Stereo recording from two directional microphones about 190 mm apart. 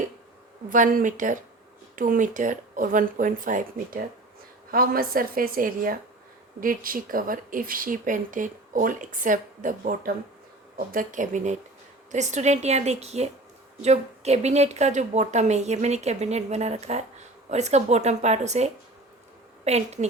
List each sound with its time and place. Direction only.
0.7 s a woman's voice: 45° right (ahead or behind)